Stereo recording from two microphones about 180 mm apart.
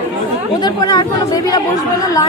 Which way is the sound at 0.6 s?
25° left (ahead or behind).